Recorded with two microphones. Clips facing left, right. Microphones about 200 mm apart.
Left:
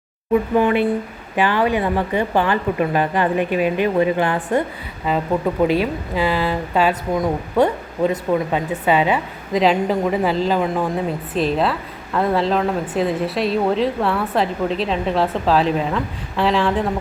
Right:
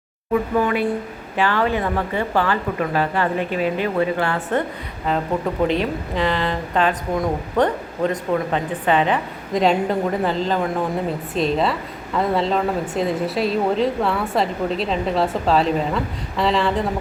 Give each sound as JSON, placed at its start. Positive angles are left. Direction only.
{"t": 0.6, "sound": "a woman's voice", "side_deg": 20}
{"t": 5.1, "sound": "a woman's voice", "side_deg": 5}